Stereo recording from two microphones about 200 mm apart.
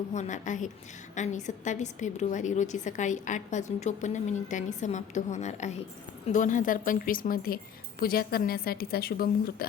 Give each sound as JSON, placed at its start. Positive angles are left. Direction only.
{"t": 0.1, "sound": "a woman's voice", "side_deg": 35}